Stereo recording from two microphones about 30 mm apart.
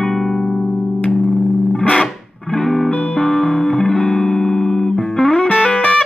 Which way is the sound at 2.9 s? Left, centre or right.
Left.